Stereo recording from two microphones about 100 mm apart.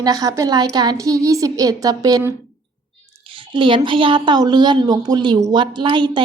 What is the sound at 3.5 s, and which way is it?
A woman's voice, 55° right (ahead or behind).